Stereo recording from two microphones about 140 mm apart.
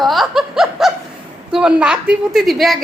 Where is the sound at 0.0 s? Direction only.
Centre (ahead or behind).